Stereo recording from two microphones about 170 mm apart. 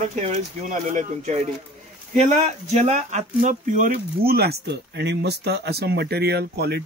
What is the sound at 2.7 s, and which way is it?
Speech, 40° right (ahead or behind).